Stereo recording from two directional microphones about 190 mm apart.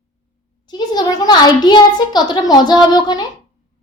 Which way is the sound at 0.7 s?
20° left (ahead or behind).